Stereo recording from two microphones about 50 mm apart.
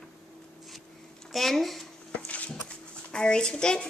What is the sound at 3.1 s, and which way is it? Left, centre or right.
Speech, centre.